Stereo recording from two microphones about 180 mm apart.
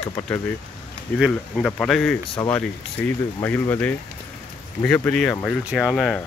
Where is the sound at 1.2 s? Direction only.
5° left (ahead or behind).